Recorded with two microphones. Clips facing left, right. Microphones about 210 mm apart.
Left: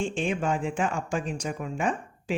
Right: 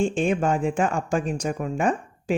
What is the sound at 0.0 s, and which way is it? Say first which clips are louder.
Speech: right 6 dB; 45° right (ahead or behind).